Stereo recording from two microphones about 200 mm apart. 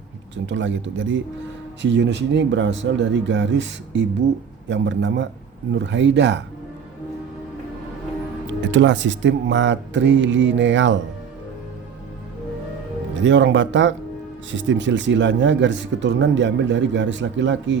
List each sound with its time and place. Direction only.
0.4 s speech: 65° right (ahead or behind)
8.6 s speech: 65° right (ahead or behind)
13.2 s speech: 65° right (ahead or behind)